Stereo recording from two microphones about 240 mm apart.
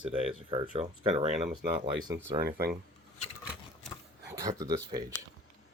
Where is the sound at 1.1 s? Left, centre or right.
Centre.